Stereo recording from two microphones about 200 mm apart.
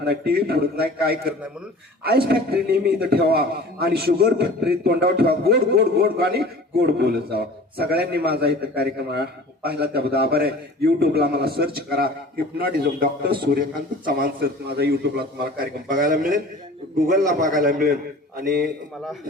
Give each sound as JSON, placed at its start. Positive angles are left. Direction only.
{"t": 0.0, "sound": "a man's voice", "side_deg": -50}